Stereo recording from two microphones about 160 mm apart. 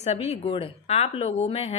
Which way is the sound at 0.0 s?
40° left (ahead or behind).